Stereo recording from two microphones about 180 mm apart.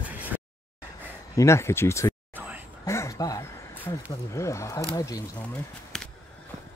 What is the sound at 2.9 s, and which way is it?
Speech, 15° left (ahead or behind).